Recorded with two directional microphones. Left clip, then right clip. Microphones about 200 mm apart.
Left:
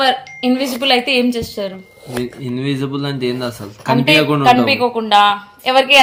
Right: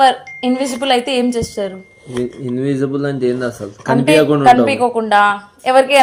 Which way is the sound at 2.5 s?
35° left (ahead or behind).